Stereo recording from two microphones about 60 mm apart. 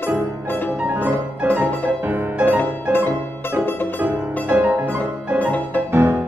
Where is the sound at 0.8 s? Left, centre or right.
Right.